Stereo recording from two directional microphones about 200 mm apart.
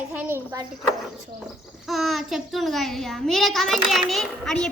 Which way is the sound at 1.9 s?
Centre (ahead or behind).